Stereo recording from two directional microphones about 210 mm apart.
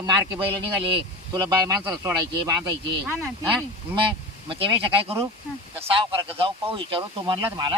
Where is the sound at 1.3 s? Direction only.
15° right (ahead or behind).